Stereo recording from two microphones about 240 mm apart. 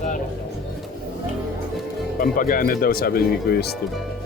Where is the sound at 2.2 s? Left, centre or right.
Left.